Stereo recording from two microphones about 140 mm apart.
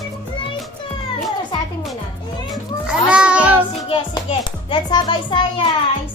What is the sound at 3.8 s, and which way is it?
A child's voice, 40° left (ahead or behind).